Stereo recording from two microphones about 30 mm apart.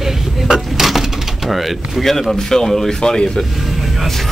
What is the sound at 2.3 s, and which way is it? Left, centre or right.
Speech, centre.